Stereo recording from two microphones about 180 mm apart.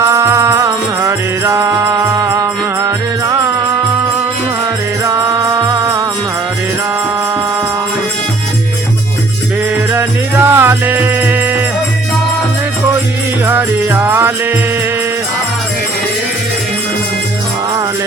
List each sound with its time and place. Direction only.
0.1 s music: 15° right (ahead or behind)
9.9 s music: 10° right (ahead or behind)
13.4 s music: 10° right (ahead or behind)